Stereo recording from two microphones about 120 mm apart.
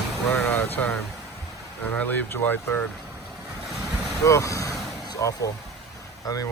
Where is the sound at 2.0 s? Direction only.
15° left (ahead or behind).